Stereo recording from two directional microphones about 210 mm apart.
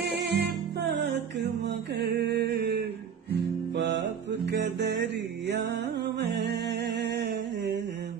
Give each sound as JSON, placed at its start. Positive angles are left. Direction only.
{"t": 0.0, "sound": "music", "side_deg": -55}
{"t": 1.7, "sound": "mantra", "side_deg": -50}
{"t": 3.7, "sound": "music", "side_deg": -55}